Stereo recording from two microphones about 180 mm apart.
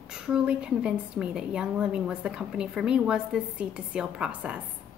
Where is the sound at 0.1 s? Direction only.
5° right (ahead or behind).